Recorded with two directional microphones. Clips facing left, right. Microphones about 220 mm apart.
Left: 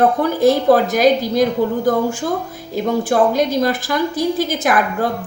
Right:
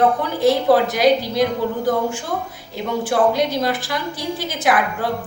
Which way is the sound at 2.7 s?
45° left (ahead or behind).